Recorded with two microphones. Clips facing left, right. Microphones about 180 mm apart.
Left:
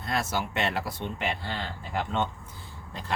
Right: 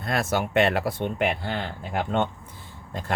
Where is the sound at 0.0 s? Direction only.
55° right (ahead or behind).